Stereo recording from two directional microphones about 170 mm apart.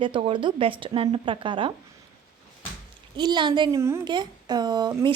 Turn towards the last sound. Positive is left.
turn(degrees=-25)  # may be behind; listen again after turning